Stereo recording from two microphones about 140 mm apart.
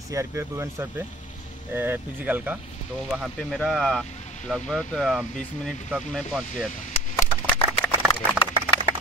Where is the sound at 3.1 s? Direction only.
Centre (ahead or behind).